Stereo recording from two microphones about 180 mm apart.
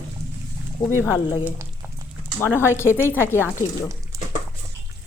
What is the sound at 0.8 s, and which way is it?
Speech, 45° left (ahead or behind).